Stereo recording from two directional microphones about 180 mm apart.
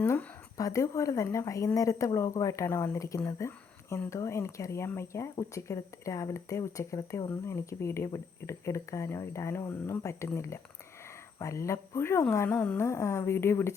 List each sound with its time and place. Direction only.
0.0 s speech: 15° left (ahead or behind)